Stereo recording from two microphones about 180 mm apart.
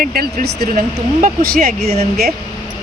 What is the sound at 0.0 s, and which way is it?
Speech, 55° right (ahead or behind).